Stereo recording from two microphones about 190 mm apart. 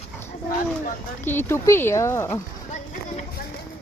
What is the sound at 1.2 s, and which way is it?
Speech, 10° left (ahead or behind).